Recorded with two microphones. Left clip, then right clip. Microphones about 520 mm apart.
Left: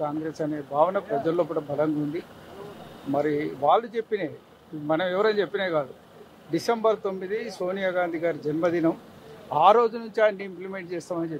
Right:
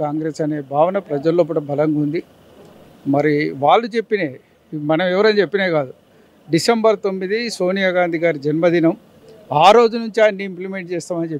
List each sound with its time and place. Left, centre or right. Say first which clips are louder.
0.0 s speech: right 8 dB; right
3.1 s speech: right 9 dB; right